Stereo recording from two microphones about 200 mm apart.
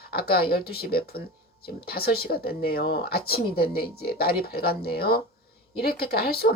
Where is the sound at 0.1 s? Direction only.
50° left (ahead or behind).